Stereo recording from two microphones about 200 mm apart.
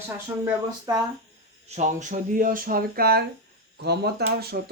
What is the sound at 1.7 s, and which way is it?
Speech, 35° right (ahead or behind).